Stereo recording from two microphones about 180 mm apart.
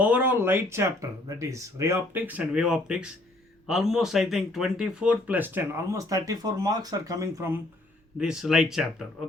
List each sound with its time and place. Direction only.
0.0 s speech: 10° right (ahead or behind)
8.2 s speech: 5° right (ahead or behind)